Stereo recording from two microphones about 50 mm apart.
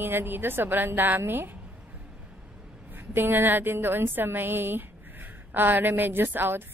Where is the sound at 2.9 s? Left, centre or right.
Right.